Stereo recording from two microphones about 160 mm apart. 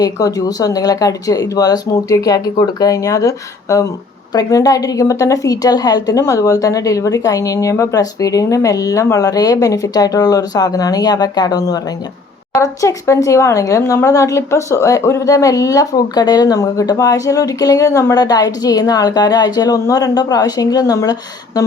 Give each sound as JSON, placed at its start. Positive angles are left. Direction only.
{"t": 0.0, "sound": "speech", "side_deg": 25}